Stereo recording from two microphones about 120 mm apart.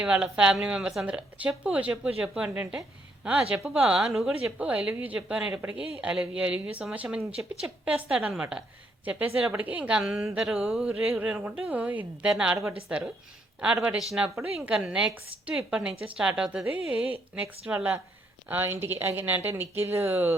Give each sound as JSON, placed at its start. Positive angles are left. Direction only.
{"t": 0.0, "sound": "a woman's voice", "side_deg": -5}